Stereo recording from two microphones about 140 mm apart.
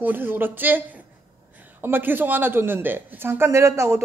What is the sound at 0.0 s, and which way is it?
A woman's voice, 15° right (ahead or behind).